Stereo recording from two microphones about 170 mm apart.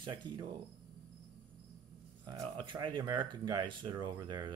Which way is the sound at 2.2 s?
25° right (ahead or behind).